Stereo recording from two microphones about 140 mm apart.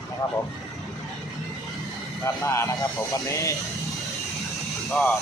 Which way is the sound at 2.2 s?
20° left (ahead or behind).